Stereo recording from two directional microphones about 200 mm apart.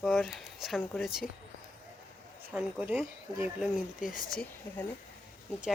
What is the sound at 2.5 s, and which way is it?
Speech, 5° right (ahead or behind).